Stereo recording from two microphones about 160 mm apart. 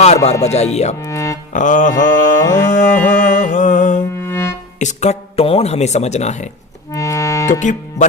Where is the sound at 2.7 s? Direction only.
50° left (ahead or behind).